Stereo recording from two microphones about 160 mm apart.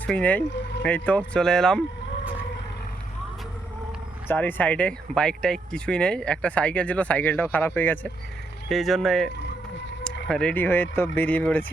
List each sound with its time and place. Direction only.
0.0 s speech: 10° left (ahead or behind)
4.3 s speech: 10° left (ahead or behind)